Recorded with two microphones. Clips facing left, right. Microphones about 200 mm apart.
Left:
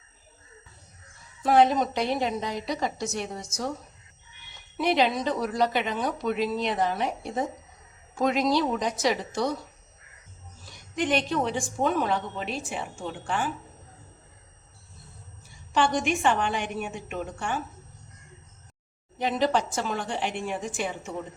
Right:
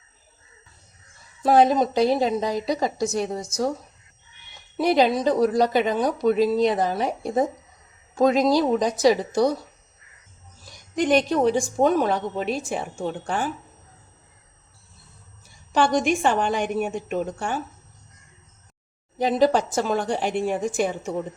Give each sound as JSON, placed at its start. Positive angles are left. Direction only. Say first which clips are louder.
{"t": 1.4, "sound": "a woman's voice", "louder": "right 3 dB", "side_deg": -35}
{"t": 4.8, "sound": "a woman's voice", "louder": "right 5 dB", "side_deg": -35}
{"t": 10.9, "sound": "a woman's voice", "louder": "right 6 dB", "side_deg": -40}
{"t": 15.7, "sound": "a woman's voice", "louder": "right 4 dB", "side_deg": -40}
{"t": 19.2, "sound": "a woman's voice", "louder": "right 5 dB", "side_deg": -40}